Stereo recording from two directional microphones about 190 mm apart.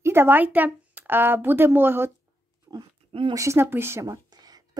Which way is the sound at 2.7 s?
25° right (ahead or behind).